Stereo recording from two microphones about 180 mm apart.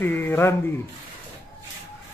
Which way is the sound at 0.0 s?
10° left (ahead or behind).